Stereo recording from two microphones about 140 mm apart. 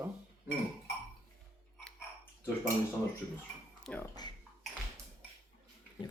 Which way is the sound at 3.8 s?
10° left (ahead or behind).